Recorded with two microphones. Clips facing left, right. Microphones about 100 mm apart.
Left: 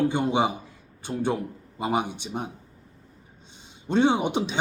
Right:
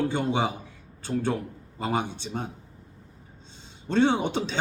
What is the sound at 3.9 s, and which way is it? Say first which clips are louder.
Speech: left 1 dB; 15° left (ahead or behind).